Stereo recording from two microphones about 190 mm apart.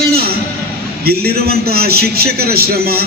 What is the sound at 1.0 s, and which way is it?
A man's voice, 55° right (ahead or behind).